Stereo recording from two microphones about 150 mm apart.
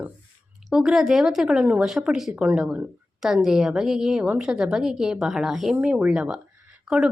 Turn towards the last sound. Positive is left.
turn(degrees=-5)  # may be behind; listen again after turning